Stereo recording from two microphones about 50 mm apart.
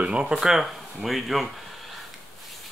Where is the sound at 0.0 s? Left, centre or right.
Right.